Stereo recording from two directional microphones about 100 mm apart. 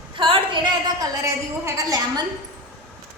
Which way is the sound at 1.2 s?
30° right (ahead or behind).